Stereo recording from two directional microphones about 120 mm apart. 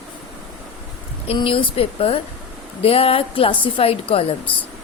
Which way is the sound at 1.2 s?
50° left (ahead or behind).